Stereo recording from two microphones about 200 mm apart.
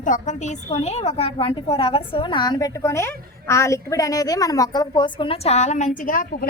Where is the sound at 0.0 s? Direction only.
40° left (ahead or behind).